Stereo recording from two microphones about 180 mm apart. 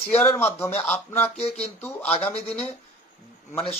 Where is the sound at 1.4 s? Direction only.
35° left (ahead or behind).